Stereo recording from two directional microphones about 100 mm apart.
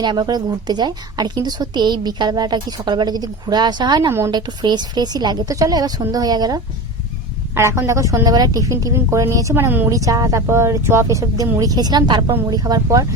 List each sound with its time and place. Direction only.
0.0 s a woman's voice: 45° right (ahead or behind)
7.5 s a woman's voice: 25° right (ahead or behind)
9.9 s a woman's voice: 35° right (ahead or behind)